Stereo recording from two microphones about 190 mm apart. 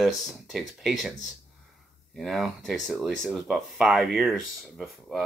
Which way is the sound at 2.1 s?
Centre (ahead or behind).